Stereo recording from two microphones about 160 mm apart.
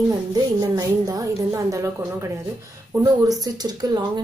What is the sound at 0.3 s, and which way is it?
A woman's voice, 20° right (ahead or behind).